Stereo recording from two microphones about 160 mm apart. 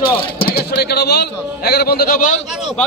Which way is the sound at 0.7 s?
85° left.